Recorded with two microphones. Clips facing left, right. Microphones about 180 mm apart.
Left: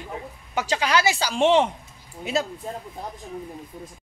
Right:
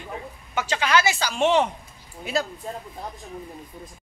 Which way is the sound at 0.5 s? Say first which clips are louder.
Even; 35° left (ahead or behind).